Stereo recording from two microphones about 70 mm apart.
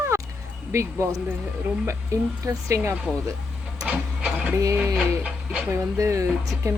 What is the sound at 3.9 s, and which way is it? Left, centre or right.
Printer, centre.